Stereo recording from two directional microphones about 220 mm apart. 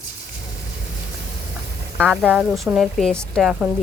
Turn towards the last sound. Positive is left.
turn(degrees=-5)  # may be behind; listen again after turning